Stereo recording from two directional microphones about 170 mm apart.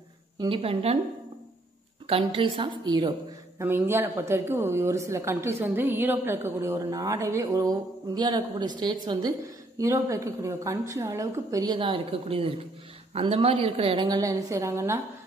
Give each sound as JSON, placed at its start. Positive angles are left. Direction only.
{"t": 0.6, "sound": "a woman's voice", "side_deg": -35}
{"t": 2.0, "sound": "a woman's voice", "side_deg": -35}
{"t": 3.6, "sound": "a woman's voice", "side_deg": -15}